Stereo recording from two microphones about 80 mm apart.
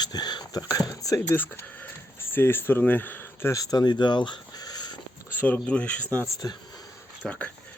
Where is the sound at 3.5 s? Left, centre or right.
Left.